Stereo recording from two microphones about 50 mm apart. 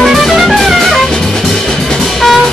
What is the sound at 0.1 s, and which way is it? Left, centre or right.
Music, centre.